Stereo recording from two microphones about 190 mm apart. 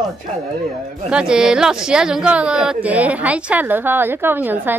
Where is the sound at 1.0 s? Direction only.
5° right (ahead or behind).